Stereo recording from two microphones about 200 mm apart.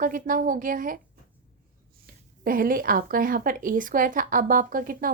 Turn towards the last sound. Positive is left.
turn(degrees=-45)  # may be behind; listen again after turning